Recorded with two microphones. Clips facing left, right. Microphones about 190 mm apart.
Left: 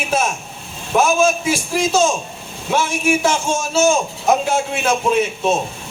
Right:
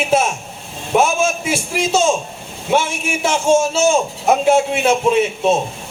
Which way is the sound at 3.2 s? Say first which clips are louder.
Right 5 dB; 25° right (ahead or behind).